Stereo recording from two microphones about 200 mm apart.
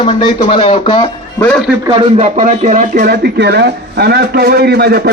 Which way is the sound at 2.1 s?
40° right (ahead or behind).